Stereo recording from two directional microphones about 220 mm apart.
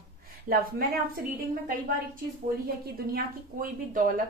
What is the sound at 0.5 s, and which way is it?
Speech, 45° right (ahead or behind).